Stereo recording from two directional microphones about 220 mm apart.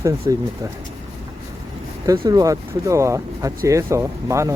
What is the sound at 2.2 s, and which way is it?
Speech, 15° right (ahead or behind).